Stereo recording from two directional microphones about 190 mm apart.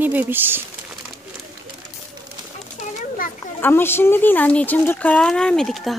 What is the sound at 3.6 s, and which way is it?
Speech, 10° left (ahead or behind).